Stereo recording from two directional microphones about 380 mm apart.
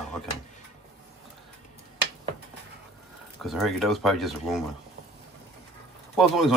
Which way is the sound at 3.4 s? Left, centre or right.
Centre.